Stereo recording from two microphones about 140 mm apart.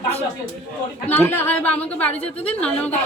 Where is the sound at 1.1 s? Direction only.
15° left (ahead or behind).